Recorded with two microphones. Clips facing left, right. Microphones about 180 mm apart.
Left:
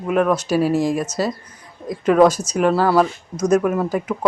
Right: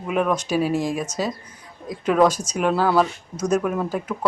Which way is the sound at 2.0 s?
10° left (ahead or behind).